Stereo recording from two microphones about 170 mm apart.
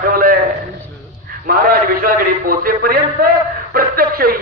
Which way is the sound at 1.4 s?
60° right (ahead or behind).